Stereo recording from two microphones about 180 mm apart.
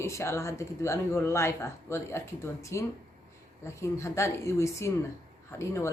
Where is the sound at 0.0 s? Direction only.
15° left (ahead or behind).